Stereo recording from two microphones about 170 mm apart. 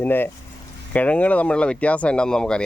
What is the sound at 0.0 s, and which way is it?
Speech, 10° left (ahead or behind).